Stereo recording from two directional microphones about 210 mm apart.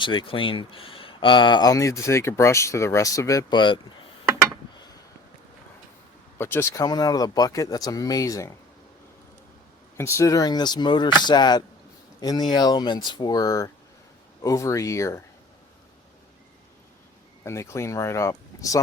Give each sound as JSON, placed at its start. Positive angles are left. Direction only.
{"t": 0.0, "sound": "speech", "side_deg": 25}
{"t": 6.4, "sound": "speech", "side_deg": 10}
{"t": 10.0, "sound": "speech", "side_deg": 15}
{"t": 17.4, "sound": "speech", "side_deg": 15}